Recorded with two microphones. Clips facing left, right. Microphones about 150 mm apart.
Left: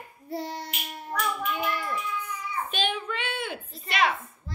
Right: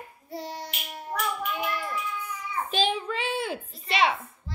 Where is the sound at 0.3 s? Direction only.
55° left (ahead or behind).